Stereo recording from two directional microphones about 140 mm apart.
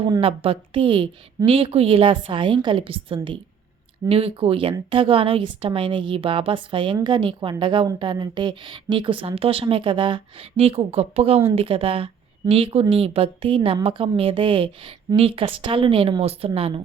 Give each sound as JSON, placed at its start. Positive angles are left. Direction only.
{"t": 0.2, "sound": "a woman's voice", "side_deg": -40}